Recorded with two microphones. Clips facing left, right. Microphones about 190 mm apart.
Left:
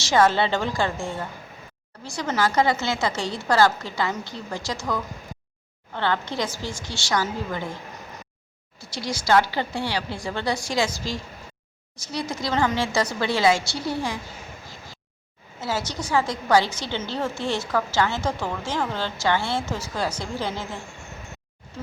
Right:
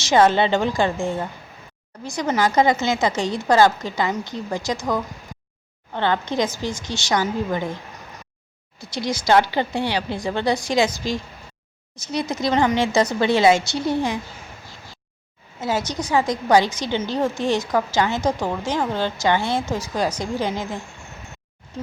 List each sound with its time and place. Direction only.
0.0 s a woman's voice: 20° right (ahead or behind)
8.8 s a woman's voice: 20° right (ahead or behind)
15.6 s a woman's voice: 20° right (ahead or behind)